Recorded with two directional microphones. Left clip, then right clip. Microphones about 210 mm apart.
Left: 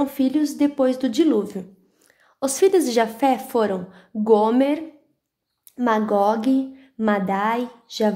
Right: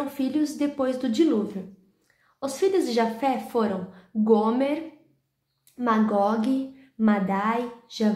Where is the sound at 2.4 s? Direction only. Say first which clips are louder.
Left 6 dB; 45° left (ahead or behind).